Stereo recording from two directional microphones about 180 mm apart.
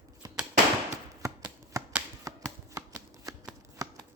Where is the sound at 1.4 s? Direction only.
10° right (ahead or behind).